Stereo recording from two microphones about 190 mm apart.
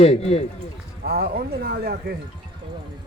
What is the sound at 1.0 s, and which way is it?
Speech, 55° right (ahead or behind).